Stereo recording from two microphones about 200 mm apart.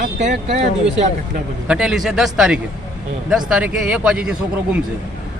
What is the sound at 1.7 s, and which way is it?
A man's voice, 5° right (ahead or behind).